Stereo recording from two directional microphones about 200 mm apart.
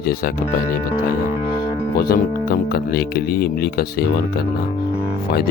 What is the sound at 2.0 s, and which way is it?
Speech, 50° left (ahead or behind).